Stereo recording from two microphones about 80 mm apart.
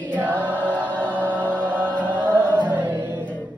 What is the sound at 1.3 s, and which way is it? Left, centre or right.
Chant, right.